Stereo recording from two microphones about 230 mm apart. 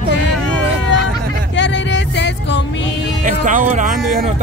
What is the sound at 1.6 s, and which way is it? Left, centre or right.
Music, left.